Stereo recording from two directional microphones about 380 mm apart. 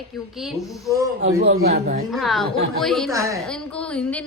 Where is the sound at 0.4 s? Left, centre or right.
Centre.